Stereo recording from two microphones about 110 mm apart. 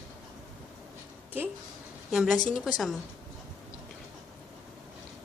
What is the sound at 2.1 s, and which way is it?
Speech, 5° right (ahead or behind).